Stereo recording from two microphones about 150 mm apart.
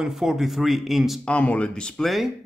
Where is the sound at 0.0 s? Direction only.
Centre (ahead or behind).